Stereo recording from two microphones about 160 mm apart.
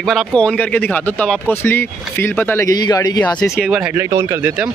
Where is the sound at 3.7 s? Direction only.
10° right (ahead or behind).